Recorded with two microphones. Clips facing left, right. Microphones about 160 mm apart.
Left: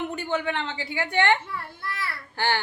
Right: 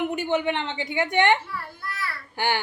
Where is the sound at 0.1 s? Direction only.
15° right (ahead or behind).